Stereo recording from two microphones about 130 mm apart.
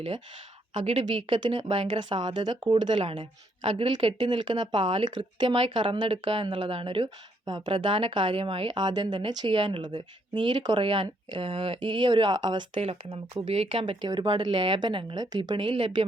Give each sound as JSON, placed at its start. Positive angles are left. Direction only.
{"t": 0.7, "sound": "speech", "side_deg": -45}
{"t": 12.8, "sound": "speech", "side_deg": -50}